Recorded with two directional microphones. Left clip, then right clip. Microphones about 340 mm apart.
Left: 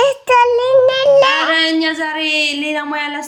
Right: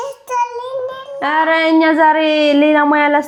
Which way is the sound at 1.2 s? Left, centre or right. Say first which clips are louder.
Left 1 dB; right.